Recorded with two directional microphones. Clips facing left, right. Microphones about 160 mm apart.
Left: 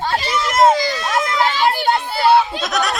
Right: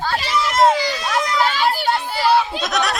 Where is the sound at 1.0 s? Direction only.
30° left (ahead or behind).